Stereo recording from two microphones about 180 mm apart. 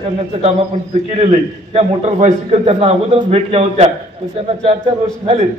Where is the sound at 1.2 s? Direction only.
35° right (ahead or behind).